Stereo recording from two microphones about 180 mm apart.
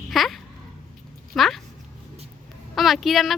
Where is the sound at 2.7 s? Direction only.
Centre (ahead or behind).